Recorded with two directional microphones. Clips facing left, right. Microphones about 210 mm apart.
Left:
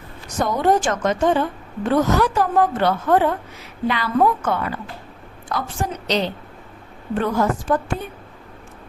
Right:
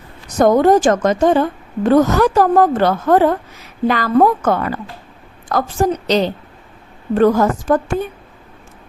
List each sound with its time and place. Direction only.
0.3 s a woman's voice: 45° right (ahead or behind)